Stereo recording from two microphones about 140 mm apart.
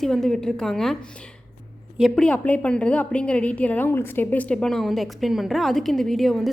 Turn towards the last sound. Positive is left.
turn(degrees=0)  # may be behind; listen again after turning